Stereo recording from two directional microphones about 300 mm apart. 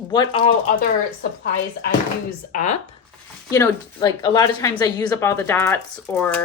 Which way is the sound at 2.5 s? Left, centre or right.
Left.